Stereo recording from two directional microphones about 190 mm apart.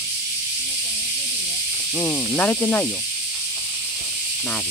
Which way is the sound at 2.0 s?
5° left (ahead or behind).